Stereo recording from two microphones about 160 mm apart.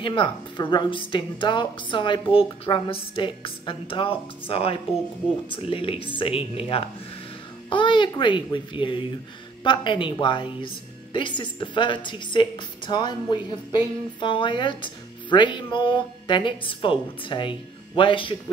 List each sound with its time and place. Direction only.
0.0 s a woman's voice: 30° left (ahead or behind)